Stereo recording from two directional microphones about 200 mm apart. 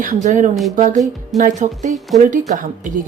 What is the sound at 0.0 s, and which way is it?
Speech, 40° right (ahead or behind).